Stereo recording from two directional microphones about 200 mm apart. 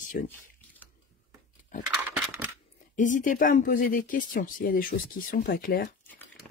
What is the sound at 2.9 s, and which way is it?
Speech, 40° left (ahead or behind).